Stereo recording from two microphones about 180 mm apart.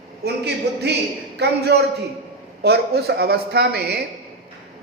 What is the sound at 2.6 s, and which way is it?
Speech, 65° right (ahead or behind).